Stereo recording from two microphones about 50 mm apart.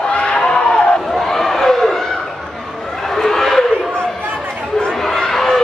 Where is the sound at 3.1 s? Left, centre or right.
Centre.